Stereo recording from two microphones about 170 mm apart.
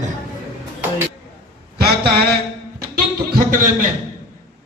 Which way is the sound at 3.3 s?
55° right (ahead or behind).